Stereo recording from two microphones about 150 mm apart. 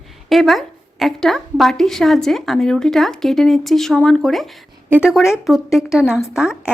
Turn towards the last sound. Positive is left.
turn(degrees=-5)  # may be behind; listen again after turning